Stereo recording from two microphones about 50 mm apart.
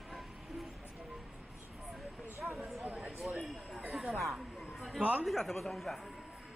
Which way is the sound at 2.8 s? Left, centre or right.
Right.